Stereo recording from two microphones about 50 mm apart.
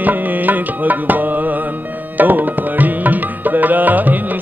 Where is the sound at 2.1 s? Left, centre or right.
Right.